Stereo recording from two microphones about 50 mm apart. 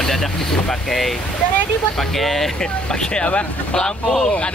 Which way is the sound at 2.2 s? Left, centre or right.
Centre.